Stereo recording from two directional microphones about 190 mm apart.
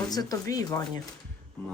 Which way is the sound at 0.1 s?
20° left (ahead or behind).